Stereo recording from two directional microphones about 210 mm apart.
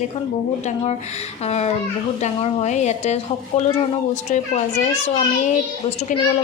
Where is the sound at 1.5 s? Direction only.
30° left (ahead or behind).